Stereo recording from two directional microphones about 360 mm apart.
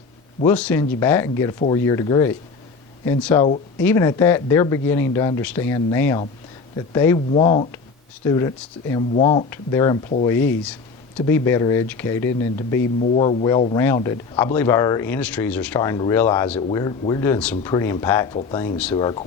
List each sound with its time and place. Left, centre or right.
0.4 s speech: centre
3.4 s speech: centre
3.8 s speech: centre